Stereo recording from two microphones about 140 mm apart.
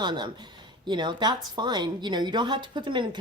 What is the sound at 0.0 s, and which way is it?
Speech, 30° right (ahead or behind).